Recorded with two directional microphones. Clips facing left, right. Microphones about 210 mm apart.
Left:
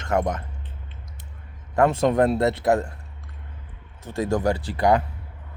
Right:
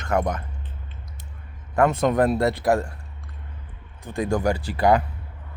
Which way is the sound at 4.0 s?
25° left (ahead or behind).